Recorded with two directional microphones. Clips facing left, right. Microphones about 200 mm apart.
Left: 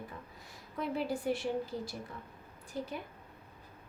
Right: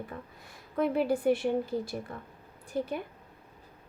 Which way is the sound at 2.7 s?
55° right (ahead or behind).